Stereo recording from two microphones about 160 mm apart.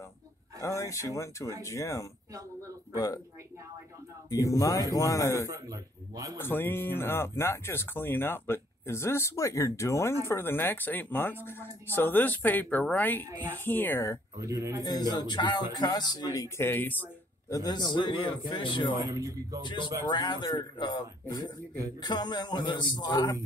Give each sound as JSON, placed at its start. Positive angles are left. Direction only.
{"t": 0.6, "sound": "speech", "side_deg": 20}
{"t": 4.3, "sound": "speech", "side_deg": 20}
{"t": 5.5, "sound": "a man's voice", "side_deg": -20}
{"t": 6.3, "sound": "speech", "side_deg": 15}
{"t": 14.4, "sound": "speech", "side_deg": -20}
{"t": 14.8, "sound": "speech", "side_deg": 25}
{"t": 16.3, "sound": "speech", "side_deg": 15}
{"t": 17.5, "sound": "speech", "side_deg": 25}
{"t": 19.0, "sound": "speech", "side_deg": -20}
{"t": 19.6, "sound": "speech", "side_deg": 30}